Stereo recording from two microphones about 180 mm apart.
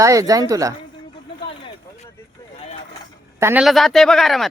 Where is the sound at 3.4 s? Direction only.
5° right (ahead or behind).